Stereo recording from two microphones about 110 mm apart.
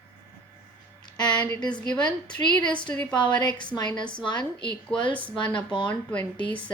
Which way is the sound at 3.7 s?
40° left (ahead or behind).